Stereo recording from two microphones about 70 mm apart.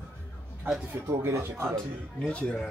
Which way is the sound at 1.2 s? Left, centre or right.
Right.